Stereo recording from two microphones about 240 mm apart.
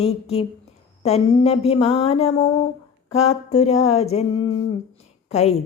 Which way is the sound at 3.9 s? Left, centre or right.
Left.